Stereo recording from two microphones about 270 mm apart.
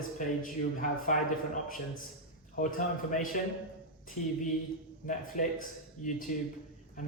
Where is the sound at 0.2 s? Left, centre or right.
Left.